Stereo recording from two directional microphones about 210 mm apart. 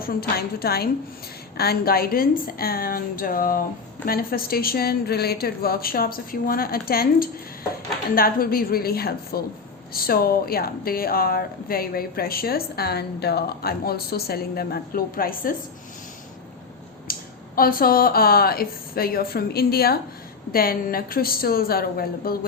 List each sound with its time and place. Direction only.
0.0 s speech: 45° left (ahead or behind)
17.1 s speech: 45° left (ahead or behind)